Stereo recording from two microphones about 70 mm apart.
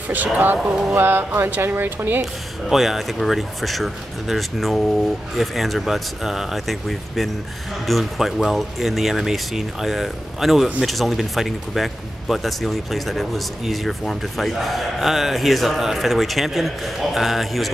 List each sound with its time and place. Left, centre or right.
0.1 s speech: right
2.7 s speech: centre